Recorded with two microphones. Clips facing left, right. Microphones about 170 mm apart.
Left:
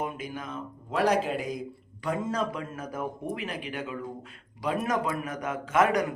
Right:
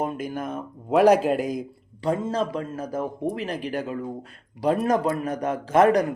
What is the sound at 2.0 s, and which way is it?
A man's voice, 30° right (ahead or behind).